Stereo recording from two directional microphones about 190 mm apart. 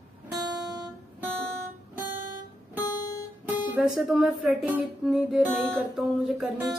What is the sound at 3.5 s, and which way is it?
Speech, 5° right (ahead or behind).